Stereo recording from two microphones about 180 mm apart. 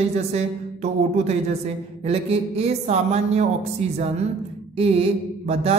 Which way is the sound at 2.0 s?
35° right (ahead or behind).